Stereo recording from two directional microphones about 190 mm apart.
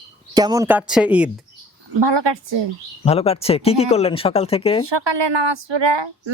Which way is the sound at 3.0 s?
30° left (ahead or behind).